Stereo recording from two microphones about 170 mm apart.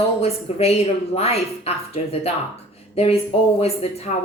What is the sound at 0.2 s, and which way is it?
A woman's voice, 35° left (ahead or behind).